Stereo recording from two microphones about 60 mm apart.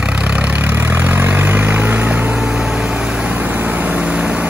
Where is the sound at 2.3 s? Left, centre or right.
Centre.